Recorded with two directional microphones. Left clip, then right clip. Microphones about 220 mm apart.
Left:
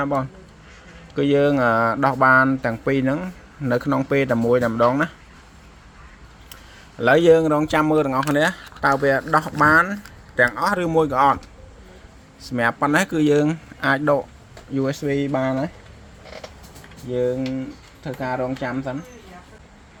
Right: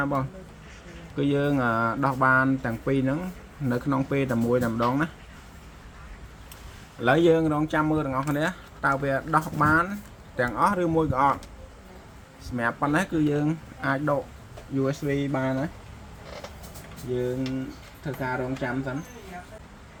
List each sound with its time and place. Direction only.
0.0 s speech: 25° left (ahead or behind)
7.0 s speech: 30° left (ahead or behind)
12.4 s speech: 35° left (ahead or behind)
18.0 s speech: 40° left (ahead or behind)